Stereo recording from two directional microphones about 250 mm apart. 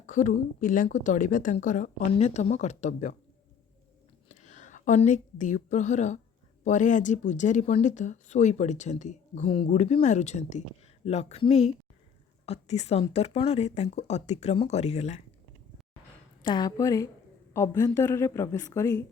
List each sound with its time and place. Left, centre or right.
0.0 s a woman's voice: left
4.3 s speech: left
16.4 s a woman's voice: centre